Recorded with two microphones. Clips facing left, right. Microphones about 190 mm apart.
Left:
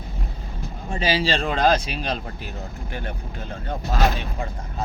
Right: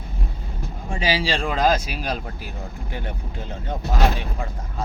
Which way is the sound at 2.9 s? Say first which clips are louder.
Even; 20° right (ahead or behind).